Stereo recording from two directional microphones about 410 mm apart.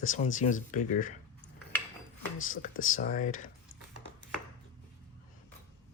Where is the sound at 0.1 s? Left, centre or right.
Centre.